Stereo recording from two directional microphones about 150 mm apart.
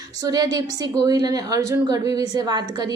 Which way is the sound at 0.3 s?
25° right (ahead or behind).